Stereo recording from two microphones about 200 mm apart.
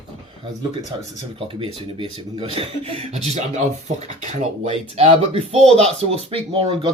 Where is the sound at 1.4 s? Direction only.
25° right (ahead or behind).